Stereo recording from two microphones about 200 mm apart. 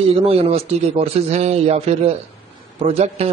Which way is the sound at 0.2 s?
30° right (ahead or behind).